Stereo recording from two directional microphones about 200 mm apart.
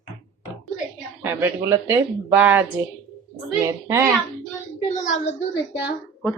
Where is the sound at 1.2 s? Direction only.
10° right (ahead or behind).